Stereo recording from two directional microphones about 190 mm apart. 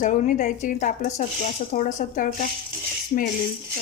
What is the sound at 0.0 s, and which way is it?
Speech, 40° left (ahead or behind).